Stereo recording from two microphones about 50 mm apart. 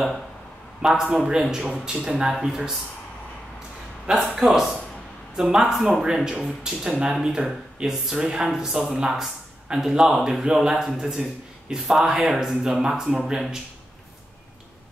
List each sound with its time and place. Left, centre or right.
0.8 s speech: centre
4.1 s speech: centre
5.3 s speech: centre
5.7 s speech: centre
6.0 s speech: centre